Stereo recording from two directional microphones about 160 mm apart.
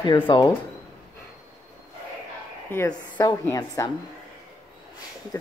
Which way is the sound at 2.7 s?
15° left (ahead or behind).